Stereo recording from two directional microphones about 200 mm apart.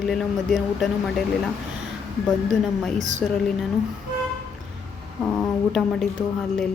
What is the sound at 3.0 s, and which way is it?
Speech, 35° right (ahead or behind).